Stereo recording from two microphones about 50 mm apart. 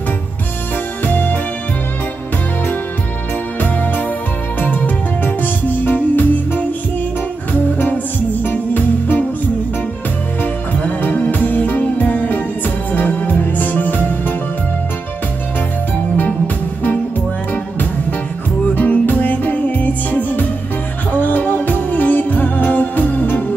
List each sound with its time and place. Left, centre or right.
1.0 s music: left
3.6 s music: left
8.5 s music: left
10.4 s music: left
18.8 s music: left